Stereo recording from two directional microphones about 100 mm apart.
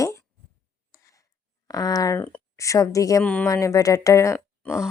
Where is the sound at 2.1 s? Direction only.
15° left (ahead or behind).